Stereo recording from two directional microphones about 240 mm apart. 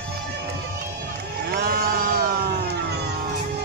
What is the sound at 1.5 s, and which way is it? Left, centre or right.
Crowd, right.